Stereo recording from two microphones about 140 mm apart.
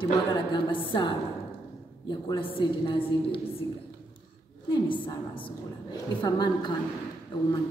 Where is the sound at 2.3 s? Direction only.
40° left (ahead or behind).